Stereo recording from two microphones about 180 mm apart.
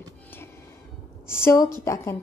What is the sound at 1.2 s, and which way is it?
Speech, 15° left (ahead or behind).